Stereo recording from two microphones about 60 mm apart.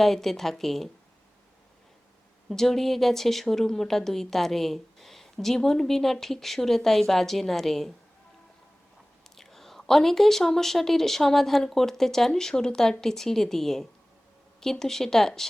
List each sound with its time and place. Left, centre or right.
0.0 s speech: centre
2.5 s speech: centre
9.3 s speech: centre